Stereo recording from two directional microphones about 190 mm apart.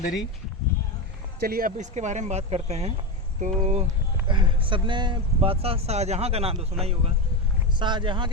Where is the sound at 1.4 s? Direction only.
55° right (ahead or behind); by 3.8 s 35° right (ahead or behind).